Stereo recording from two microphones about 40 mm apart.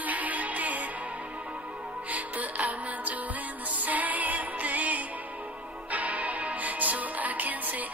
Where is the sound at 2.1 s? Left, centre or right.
Right.